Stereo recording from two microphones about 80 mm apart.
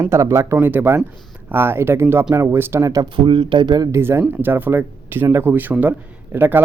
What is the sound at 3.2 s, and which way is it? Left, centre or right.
Speech, right.